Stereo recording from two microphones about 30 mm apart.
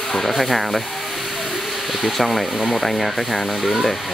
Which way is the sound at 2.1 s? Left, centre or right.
Centre.